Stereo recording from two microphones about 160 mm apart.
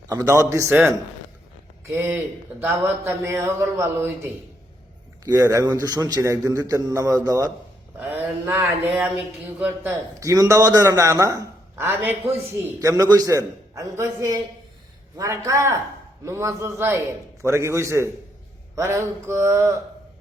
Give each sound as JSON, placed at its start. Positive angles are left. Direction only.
{"t": 0.1, "sound": "a man's voice", "side_deg": -20}
{"t": 5.2, "sound": "a man's voice", "side_deg": -20}
{"t": 7.9, "sound": "mantra", "side_deg": -15}
{"t": 9.0, "sound": "a man's voice", "side_deg": -10}